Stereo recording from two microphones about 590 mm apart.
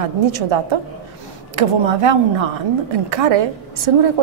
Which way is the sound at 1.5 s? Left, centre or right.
Right.